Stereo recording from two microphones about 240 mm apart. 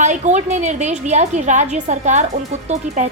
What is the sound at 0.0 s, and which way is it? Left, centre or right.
A woman's voice, right.